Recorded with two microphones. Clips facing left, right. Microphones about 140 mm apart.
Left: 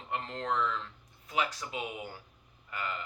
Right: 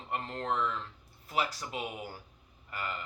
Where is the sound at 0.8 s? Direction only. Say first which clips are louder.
Even; 35° right (ahead or behind).